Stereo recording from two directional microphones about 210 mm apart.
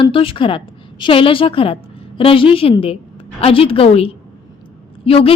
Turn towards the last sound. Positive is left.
turn(degrees=25)  # may be behind; listen again after turning